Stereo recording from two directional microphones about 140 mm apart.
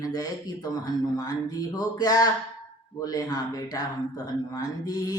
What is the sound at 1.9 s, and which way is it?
A man's voice, 25° left (ahead or behind).